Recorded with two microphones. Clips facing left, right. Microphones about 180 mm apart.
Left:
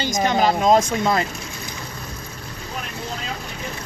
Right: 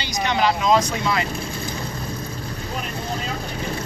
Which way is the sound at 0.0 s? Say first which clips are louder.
Left 2 dB; 45° left (ahead or behind).